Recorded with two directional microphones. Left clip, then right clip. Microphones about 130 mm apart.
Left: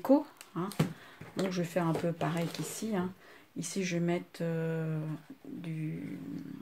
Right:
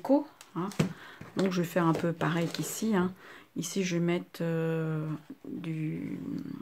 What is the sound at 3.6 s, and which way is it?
Speech, 30° right (ahead or behind).